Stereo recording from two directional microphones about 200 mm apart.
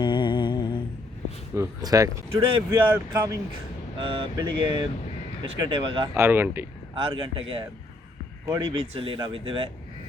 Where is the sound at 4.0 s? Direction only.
25° right (ahead or behind).